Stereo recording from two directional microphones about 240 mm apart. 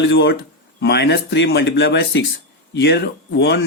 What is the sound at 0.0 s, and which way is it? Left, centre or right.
Speech, left.